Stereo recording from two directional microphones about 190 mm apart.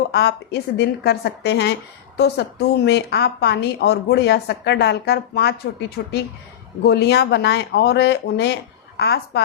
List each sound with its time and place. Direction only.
0.1 s a woman's voice: 60° left (ahead or behind)
6.8 s a woman's voice: 60° left (ahead or behind)